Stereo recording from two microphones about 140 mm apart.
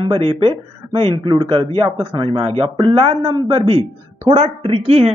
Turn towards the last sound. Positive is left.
turn(degrees=-45)  # may be behind; listen again after turning